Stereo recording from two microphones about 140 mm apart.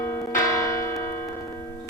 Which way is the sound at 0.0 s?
15° left (ahead or behind).